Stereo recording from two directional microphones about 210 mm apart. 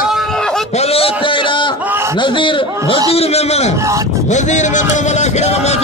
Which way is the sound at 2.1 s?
25° left (ahead or behind).